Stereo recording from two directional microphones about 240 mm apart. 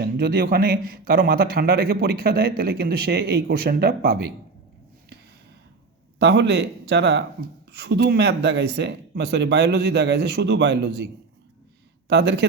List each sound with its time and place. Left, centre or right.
0.0 s speech: right
6.1 s speech: right